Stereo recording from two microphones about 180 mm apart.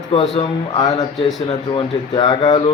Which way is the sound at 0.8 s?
20° left (ahead or behind).